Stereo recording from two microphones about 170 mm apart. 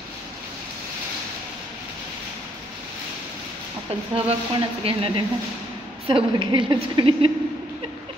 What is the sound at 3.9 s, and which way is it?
A woman's voice, 35° right (ahead or behind).